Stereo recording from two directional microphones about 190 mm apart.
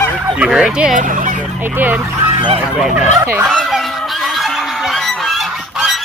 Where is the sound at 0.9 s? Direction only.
45° right (ahead or behind).